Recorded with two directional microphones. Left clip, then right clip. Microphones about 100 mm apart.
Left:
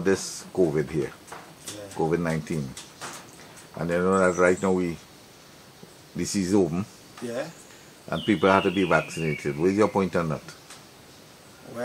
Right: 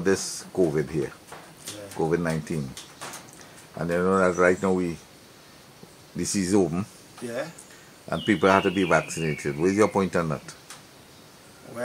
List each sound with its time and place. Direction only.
0.0 s speech: 20° right (ahead or behind)
2.2 s speech: 15° right (ahead or behind)
3.7 s speech: 10° right (ahead or behind)
6.1 s speech: 25° right (ahead or behind)
7.2 s speech: centre (ahead or behind)
8.1 s speech: 20° right (ahead or behind)